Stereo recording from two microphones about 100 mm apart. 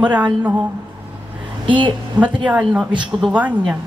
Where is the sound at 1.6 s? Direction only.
55° right (ahead or behind).